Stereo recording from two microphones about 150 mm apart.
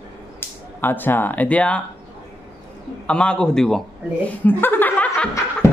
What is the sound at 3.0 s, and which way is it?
Speech, 5° left (ahead or behind).